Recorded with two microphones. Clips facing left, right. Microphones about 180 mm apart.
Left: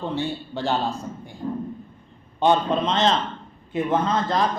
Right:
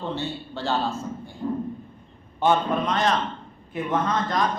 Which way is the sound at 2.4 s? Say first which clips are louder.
Left 2 dB; 20° left (ahead or behind).